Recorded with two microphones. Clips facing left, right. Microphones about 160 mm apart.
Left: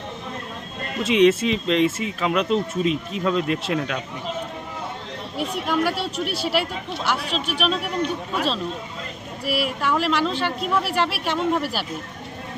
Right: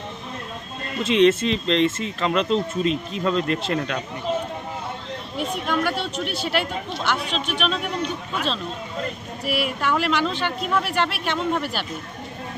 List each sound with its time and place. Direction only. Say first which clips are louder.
1.0 s speech: even; 5° left (ahead or behind)
5.4 s speech: left 1 dB; 5° left (ahead or behind)
9.5 s speech: even; centre (ahead or behind)